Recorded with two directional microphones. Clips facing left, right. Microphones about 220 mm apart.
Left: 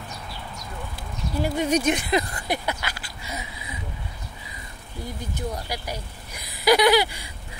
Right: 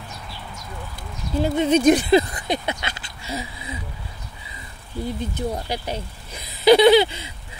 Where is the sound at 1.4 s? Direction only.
25° right (ahead or behind).